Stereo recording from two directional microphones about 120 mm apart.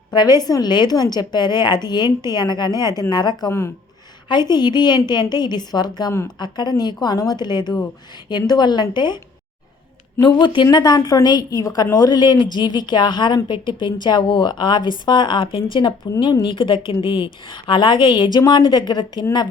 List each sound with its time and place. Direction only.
0.1 s a woman's voice: 35° left (ahead or behind)